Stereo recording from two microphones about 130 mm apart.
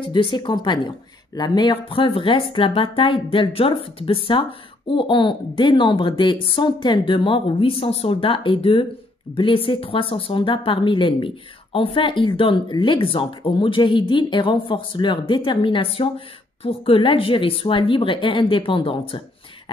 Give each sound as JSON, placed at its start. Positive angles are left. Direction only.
{"t": 0.0, "sound": "speech", "side_deg": 40}